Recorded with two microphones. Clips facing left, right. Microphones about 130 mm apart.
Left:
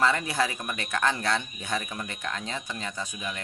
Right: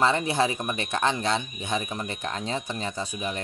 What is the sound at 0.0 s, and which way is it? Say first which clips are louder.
Speech: right 3 dB; 25° right (ahead or behind).